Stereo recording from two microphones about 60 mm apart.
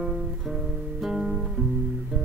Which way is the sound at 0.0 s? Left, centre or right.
Centre.